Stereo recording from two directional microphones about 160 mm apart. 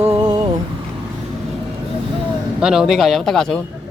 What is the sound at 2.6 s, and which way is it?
Speech, 5° right (ahead or behind).